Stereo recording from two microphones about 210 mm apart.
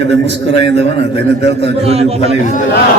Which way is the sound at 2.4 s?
40° left (ahead or behind).